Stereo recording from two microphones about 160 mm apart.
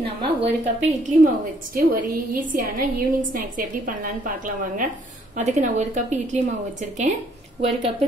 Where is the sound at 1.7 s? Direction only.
65° right (ahead or behind).